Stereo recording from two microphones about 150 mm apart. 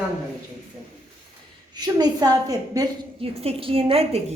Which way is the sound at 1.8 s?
25° right (ahead or behind).